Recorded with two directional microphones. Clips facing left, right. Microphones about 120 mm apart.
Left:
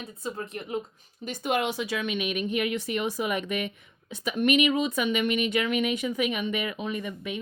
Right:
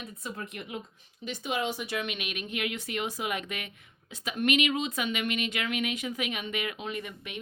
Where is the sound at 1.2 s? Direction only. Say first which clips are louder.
Left 4 dB; 50° left (ahead or behind); by 1.9 s 70° left (ahead or behind).